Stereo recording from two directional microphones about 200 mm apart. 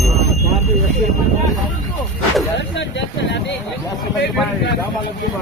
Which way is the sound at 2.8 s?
65° left (ahead or behind).